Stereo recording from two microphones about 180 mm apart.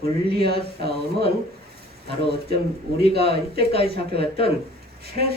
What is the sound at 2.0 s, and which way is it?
A man's voice, 65° right (ahead or behind).